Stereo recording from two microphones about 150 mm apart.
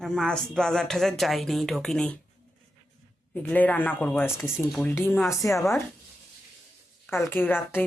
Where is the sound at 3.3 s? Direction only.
10° left (ahead or behind).